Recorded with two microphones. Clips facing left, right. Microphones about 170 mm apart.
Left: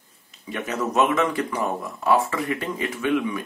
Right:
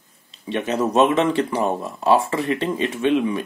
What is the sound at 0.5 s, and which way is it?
Speech, 30° right (ahead or behind).